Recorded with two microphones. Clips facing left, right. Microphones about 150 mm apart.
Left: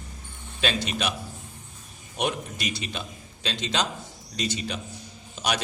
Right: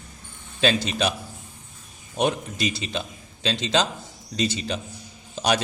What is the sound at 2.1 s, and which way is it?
A man's voice, 30° right (ahead or behind).